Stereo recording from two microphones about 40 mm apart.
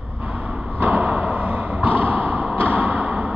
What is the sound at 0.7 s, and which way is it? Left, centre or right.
Thump, right.